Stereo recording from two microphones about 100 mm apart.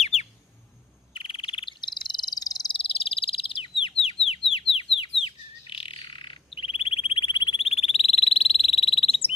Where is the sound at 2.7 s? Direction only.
65° left (ahead or behind).